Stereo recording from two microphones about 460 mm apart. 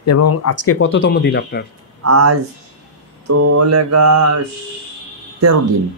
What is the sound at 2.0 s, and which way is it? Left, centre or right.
Speech, right.